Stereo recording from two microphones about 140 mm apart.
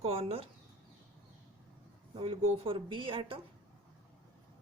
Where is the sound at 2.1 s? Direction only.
40° right (ahead or behind).